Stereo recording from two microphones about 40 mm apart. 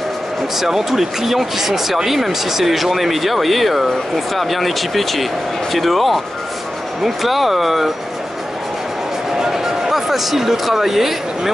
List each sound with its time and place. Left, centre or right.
0.6 s speech: centre
9.4 s speech: centre